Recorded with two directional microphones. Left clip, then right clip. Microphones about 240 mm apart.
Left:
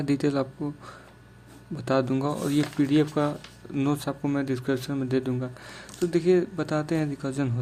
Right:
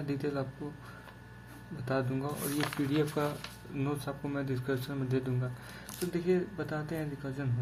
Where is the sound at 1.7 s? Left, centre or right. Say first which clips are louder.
Left 9 dB; left.